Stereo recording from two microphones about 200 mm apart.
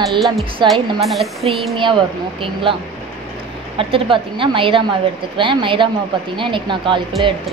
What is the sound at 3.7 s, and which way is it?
Speech, 25° right (ahead or behind).